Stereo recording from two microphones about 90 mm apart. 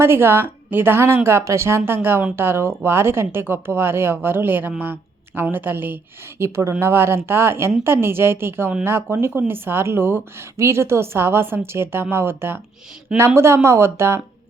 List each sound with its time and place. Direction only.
0.0 s a woman's voice: 25° right (ahead or behind)